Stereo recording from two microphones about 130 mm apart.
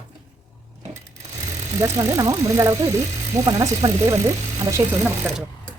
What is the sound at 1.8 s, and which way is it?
Speech, 25° right (ahead or behind).